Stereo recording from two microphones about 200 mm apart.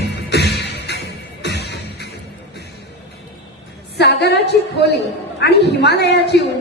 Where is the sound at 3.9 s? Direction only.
60° left (ahead or behind).